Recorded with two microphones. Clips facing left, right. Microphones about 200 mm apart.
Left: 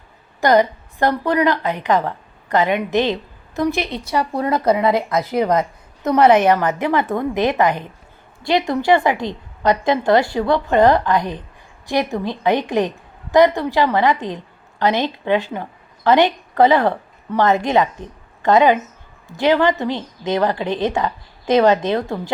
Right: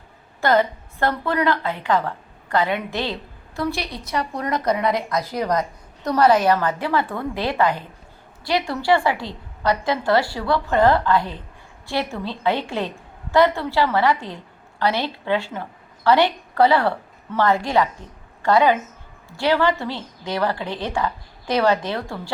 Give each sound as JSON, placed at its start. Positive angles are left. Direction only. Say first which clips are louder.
{"t": 0.4, "sound": "a woman's voice", "louder": "left 4 dB", "side_deg": 15}